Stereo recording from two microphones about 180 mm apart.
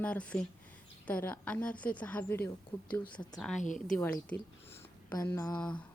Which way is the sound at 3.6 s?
45° left (ahead or behind).